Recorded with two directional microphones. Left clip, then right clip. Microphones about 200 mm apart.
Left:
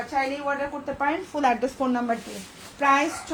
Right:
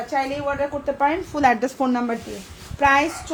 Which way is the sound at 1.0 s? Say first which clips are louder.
Right 5 dB; 45° right (ahead or behind).